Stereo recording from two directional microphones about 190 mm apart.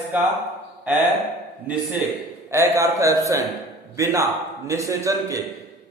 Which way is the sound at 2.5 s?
15° right (ahead or behind).